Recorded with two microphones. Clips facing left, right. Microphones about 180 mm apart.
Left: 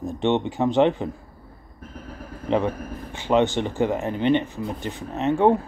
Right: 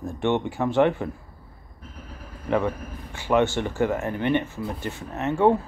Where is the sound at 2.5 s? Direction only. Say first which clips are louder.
Left 1 dB; 20° left (ahead or behind).